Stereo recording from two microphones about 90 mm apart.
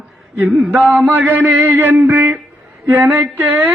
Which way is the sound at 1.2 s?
20° right (ahead or behind).